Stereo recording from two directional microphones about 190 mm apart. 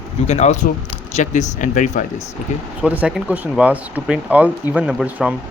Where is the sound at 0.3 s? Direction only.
35° left (ahead or behind).